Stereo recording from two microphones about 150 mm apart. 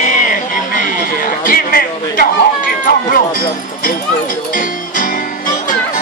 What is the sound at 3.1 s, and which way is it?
Music, 70° left (ahead or behind).